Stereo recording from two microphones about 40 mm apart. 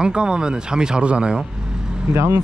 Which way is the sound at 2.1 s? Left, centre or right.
Right.